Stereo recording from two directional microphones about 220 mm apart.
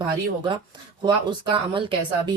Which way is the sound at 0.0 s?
20° right (ahead or behind).